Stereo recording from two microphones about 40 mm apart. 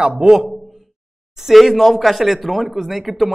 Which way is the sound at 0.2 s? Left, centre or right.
Centre.